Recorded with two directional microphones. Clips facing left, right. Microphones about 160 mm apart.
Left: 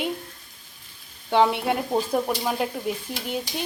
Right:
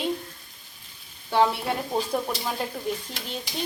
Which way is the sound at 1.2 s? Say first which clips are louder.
Left 2 dB; 20° left (ahead or behind).